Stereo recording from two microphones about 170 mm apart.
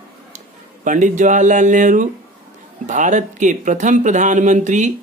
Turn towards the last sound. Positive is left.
turn(degrees=-45)  # may be behind; listen again after turning